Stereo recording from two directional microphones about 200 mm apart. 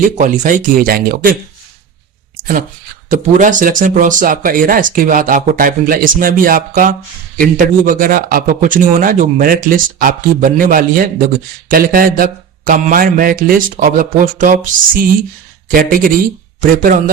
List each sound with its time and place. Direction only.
0.2 s speech: 40° right (ahead or behind)
3.1 s speech: 40° right (ahead or behind)